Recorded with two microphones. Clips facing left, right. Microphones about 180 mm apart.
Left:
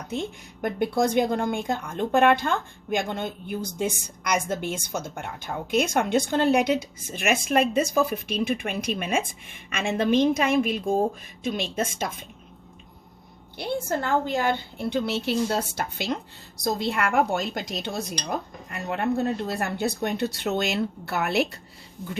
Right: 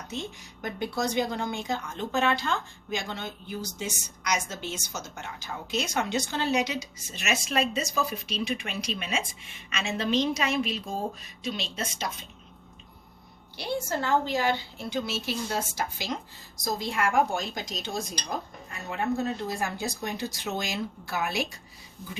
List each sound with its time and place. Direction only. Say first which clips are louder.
0.1 s a woman's voice: left 6 dB; 55° left (ahead or behind)
13.6 s speech: left 3 dB; 55° left (ahead or behind)